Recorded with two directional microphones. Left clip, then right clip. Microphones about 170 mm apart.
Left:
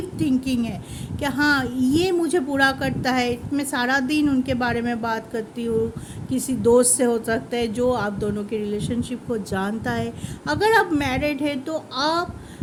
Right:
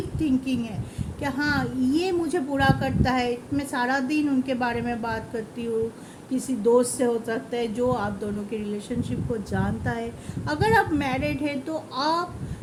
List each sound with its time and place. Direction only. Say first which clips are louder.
0.2 s speech: left 3 dB; 50° left (ahead or behind)
6.3 s speech: left 3 dB; 55° left (ahead or behind)